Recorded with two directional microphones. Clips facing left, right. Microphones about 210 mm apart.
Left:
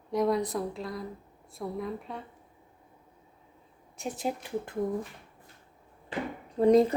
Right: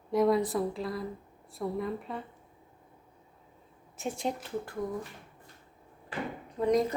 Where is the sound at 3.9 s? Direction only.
Centre (ahead or behind).